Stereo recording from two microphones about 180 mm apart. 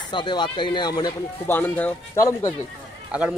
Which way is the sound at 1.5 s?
10° left (ahead or behind).